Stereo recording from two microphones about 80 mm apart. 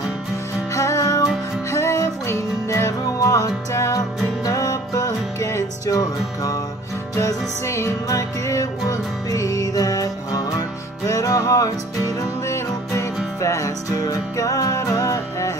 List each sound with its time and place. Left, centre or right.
0.7 s music: left